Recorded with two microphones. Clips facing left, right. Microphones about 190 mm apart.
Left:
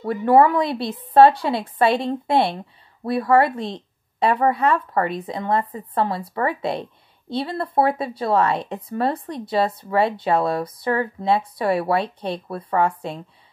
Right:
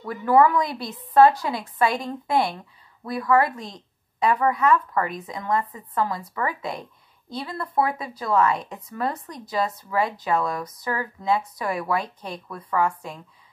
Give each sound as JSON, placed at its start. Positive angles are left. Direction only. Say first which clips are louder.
{"t": 0.0, "sound": "a woman's voice", "louder": "left 3 dB", "side_deg": 30}